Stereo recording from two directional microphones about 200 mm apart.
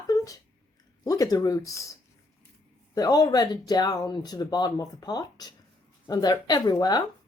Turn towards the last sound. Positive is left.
turn(degrees=20)  # may be behind; listen again after turning